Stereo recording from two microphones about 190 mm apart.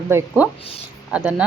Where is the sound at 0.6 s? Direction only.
30° left (ahead or behind).